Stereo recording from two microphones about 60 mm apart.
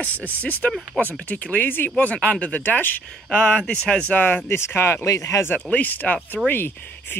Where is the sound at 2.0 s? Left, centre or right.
Left.